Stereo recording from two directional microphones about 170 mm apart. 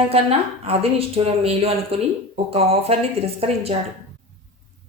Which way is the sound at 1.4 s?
35° right (ahead or behind).